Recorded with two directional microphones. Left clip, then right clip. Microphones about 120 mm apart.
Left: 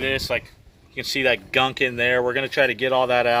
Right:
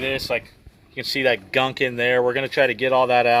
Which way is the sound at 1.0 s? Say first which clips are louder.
Even; 55° right (ahead or behind).